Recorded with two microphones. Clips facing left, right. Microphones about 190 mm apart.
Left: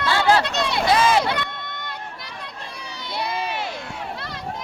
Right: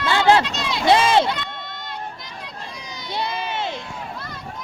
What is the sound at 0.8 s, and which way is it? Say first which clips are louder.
Run: right 3 dB; 25° right (ahead or behind).